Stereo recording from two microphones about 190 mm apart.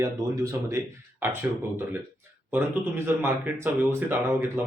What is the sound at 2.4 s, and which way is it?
Speech, 10° right (ahead or behind).